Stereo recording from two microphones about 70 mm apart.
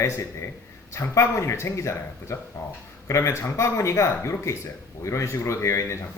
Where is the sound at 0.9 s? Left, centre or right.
Left.